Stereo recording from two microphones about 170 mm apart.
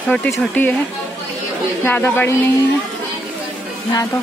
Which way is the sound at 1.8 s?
10° left (ahead or behind).